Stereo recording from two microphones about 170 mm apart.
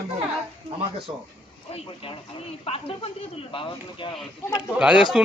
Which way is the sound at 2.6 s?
35° left (ahead or behind).